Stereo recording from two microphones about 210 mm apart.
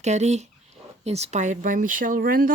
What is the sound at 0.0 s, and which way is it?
Speech, 35° right (ahead or behind).